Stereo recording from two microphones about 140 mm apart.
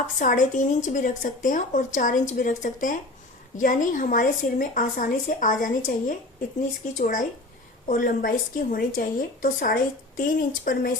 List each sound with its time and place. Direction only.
0.2 s a woman's voice: 70° left (ahead or behind)
7.9 s a woman's voice: 80° left